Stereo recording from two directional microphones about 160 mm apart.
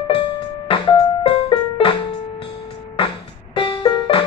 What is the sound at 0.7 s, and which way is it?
Music, 30° left (ahead or behind).